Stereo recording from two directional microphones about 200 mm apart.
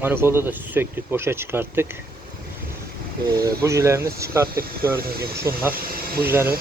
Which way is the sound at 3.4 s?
15° right (ahead or behind).